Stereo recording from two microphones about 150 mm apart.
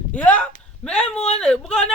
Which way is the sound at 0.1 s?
10° left (ahead or behind).